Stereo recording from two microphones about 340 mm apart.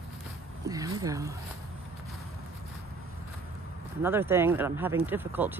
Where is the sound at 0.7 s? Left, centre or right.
Centre.